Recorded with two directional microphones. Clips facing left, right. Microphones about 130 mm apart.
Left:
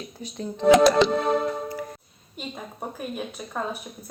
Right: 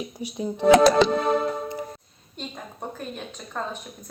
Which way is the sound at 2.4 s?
10° left (ahead or behind).